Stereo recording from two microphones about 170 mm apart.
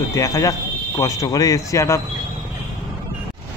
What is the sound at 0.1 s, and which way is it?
Speech, 20° left (ahead or behind).